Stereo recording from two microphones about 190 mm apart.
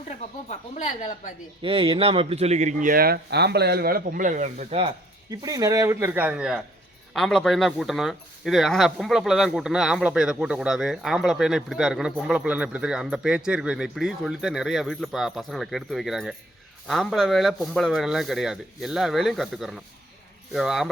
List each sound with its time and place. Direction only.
0.1 s speech: 35° left (ahead or behind)
1.6 s speech: 30° right (ahead or behind)
5.3 s speech: 20° right (ahead or behind); by 20.9 s centre (ahead or behind)